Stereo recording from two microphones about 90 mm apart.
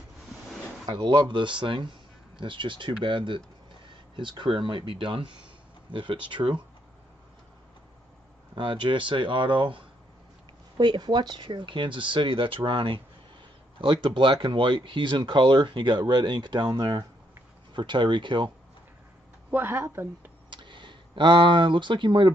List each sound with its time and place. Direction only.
0.8 s speech: 60° right (ahead or behind)
8.5 s speech: 65° right (ahead or behind)
10.8 s speech: 50° right (ahead or behind); by 13.0 s 70° right (ahead or behind)
14.0 s speech: 65° right (ahead or behind)
19.5 s speech: 25° right (ahead or behind)
20.4 s speech: 60° right (ahead or behind)